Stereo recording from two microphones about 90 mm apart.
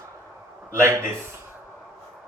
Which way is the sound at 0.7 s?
30° right (ahead or behind).